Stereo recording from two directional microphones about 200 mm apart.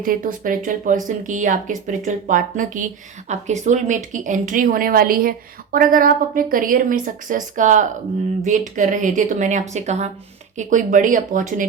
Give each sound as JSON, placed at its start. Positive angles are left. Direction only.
{"t": 0.0, "sound": "speech", "side_deg": -45}